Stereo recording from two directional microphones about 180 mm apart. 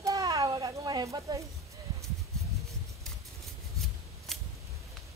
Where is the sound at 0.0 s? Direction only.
20° right (ahead or behind).